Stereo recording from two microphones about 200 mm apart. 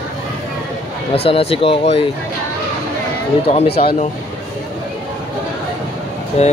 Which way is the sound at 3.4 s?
30° left (ahead or behind).